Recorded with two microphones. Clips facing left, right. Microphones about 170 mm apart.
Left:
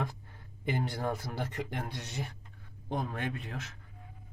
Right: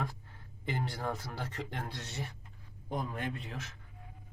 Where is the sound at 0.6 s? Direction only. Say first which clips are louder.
Left 3 dB; 15° left (ahead or behind).